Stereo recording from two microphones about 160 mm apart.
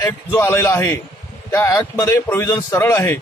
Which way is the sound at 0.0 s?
15° left (ahead or behind).